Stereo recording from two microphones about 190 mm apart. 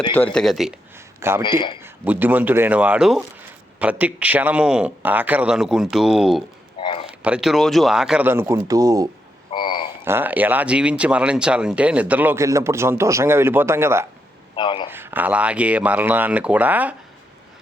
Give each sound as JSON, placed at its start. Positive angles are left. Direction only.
{"t": 0.1, "sound": "speech", "side_deg": 10}
{"t": 1.4, "sound": "a man's voice", "side_deg": 25}
{"t": 1.8, "sound": "speech", "side_deg": -10}
{"t": 6.7, "sound": "a sound", "side_deg": 30}
{"t": 7.1, "sound": "speech", "side_deg": -5}
{"t": 9.6, "sound": "a sound", "side_deg": 25}
{"t": 10.0, "sound": "speech", "side_deg": -10}
{"t": 14.5, "sound": "a man's voice", "side_deg": 25}
{"t": 14.8, "sound": "speech", "side_deg": -10}